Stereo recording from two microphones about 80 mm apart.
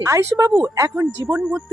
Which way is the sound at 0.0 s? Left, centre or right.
Right.